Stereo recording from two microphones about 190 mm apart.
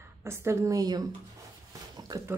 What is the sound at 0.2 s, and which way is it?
Speech, 15° right (ahead or behind).